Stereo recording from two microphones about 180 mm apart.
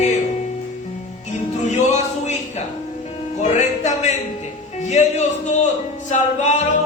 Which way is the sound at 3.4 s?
40° left (ahead or behind).